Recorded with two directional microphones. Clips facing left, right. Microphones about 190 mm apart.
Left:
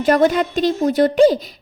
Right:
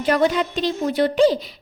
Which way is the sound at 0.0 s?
45° left (ahead or behind).